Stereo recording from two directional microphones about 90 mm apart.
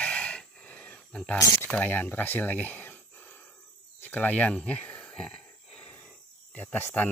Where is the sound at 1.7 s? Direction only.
15° left (ahead or behind).